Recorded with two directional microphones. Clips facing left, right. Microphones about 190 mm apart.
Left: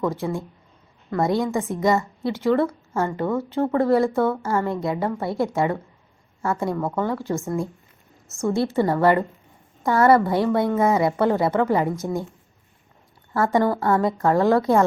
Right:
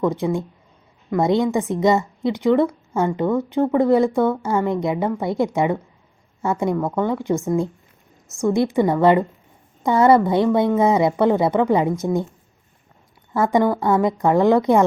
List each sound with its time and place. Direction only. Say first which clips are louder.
0.0 s a woman's voice: right 4 dB; 20° right (ahead or behind)
8.4 s a woman's voice: right 3 dB; 15° right (ahead or behind)
13.3 s a woman's voice: right 2 dB; 15° right (ahead or behind)